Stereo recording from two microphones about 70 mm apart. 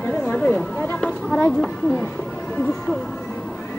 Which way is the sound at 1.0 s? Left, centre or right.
Centre.